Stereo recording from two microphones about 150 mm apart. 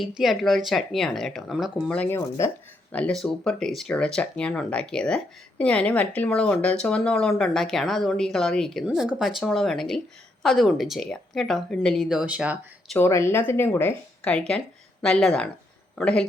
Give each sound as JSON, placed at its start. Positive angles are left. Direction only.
{"t": 0.2, "sound": "speech", "side_deg": 0}
{"t": 2.0, "sound": "speech", "side_deg": 15}
{"t": 2.9, "sound": "speech", "side_deg": 5}
{"t": 13.0, "sound": "speech", "side_deg": 15}